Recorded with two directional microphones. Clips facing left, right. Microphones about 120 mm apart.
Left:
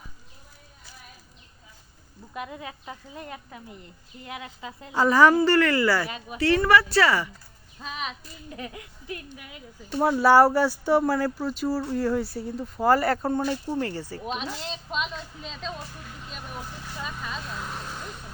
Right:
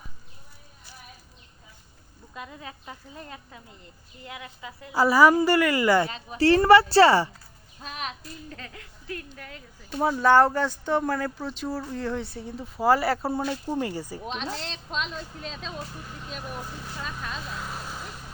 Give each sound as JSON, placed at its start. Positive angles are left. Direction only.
{"t": 2.3, "sound": "a woman's voice", "side_deg": 15}
{"t": 4.9, "sound": "a woman's voice", "side_deg": -10}
{"t": 6.1, "sound": "a woman's voice", "side_deg": 15}
{"t": 6.3, "sound": "speech", "side_deg": -30}
{"t": 7.8, "sound": "speech", "side_deg": 0}
{"t": 8.4, "sound": "a woman's voice", "side_deg": 15}
{"t": 14.3, "sound": "speech", "side_deg": 5}
{"t": 16.3, "sound": "vehicle", "side_deg": 0}